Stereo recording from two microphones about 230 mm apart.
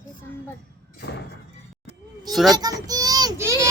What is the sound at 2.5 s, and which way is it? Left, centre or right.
Children playing, centre.